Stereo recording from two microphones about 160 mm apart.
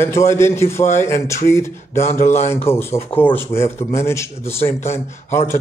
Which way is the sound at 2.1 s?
45° left (ahead or behind).